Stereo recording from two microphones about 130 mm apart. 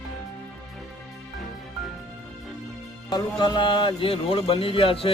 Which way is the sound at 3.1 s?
35° left (ahead or behind).